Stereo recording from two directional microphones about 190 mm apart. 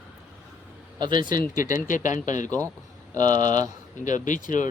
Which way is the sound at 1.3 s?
45° left (ahead or behind).